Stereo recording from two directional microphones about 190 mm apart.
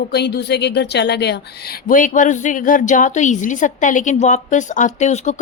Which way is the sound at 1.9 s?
45° left (ahead or behind).